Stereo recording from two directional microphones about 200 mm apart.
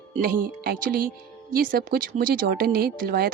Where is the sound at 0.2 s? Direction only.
50° right (ahead or behind).